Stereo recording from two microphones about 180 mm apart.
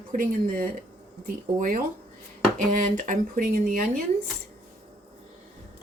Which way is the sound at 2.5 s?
45° right (ahead or behind).